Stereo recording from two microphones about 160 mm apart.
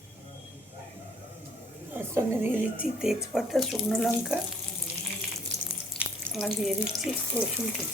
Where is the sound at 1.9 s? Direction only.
15° right (ahead or behind).